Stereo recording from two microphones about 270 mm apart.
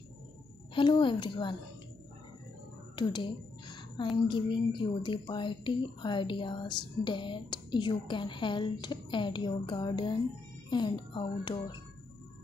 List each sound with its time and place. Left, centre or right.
0.7 s speech: centre
3.0 s speech: centre